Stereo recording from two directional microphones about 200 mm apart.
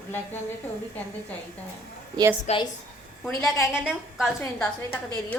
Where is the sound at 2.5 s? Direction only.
35° left (ahead or behind).